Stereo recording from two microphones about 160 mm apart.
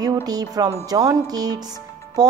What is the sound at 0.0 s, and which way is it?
A woman's voice, 25° right (ahead or behind).